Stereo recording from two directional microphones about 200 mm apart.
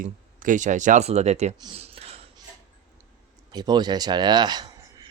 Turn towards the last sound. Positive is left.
turn(degrees=-20)  # may be behind; listen again after turning